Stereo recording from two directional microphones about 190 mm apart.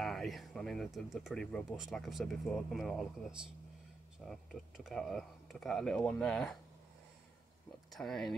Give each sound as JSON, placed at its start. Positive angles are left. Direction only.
{"t": 0.0, "sound": "speech", "side_deg": 0}
{"t": 7.9, "sound": "speech", "side_deg": 0}